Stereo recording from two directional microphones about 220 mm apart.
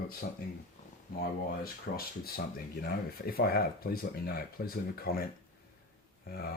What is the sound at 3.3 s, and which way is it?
Speech, 45° left (ahead or behind).